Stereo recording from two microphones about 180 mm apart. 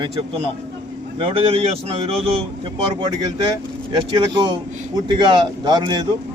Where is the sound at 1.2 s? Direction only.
30° right (ahead or behind).